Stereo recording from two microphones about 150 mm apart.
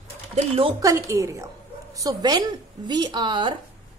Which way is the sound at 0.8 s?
20° right (ahead or behind).